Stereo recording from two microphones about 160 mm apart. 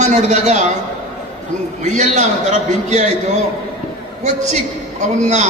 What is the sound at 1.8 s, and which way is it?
A man's voice, 50° right (ahead or behind).